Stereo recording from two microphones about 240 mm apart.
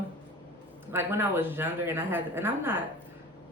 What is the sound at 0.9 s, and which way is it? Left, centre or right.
Speech, centre.